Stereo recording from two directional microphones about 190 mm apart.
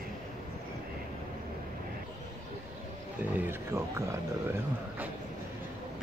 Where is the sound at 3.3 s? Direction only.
15° right (ahead or behind).